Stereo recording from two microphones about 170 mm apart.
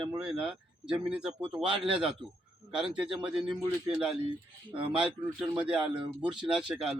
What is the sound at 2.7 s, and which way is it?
Speech, 5° right (ahead or behind).